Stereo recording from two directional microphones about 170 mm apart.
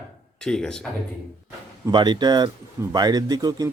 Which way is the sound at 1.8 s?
25° right (ahead or behind).